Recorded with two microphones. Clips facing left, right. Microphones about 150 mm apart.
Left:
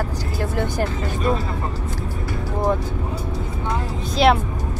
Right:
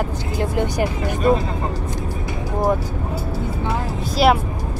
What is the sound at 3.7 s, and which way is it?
Vehicle, 5° right (ahead or behind).